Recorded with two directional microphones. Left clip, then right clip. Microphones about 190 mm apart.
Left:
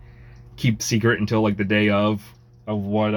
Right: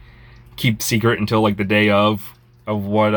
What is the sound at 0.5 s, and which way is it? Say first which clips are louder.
Speech: right 4 dB; 15° right (ahead or behind).